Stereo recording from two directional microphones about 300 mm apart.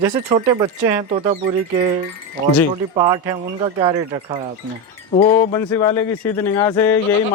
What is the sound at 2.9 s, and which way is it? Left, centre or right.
Speech, centre.